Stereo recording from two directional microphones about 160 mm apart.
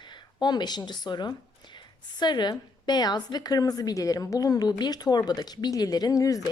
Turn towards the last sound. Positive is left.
turn(degrees=20)  # may be behind; listen again after turning